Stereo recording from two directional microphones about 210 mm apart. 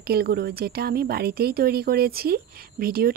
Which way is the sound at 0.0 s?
50° right (ahead or behind).